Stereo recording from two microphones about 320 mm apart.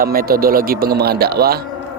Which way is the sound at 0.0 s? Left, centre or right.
Right.